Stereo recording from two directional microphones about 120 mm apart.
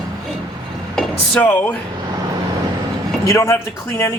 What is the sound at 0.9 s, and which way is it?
Speech, 5° left (ahead or behind).